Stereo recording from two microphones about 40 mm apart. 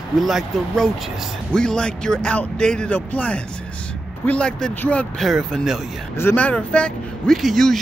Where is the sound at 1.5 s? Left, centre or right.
Left.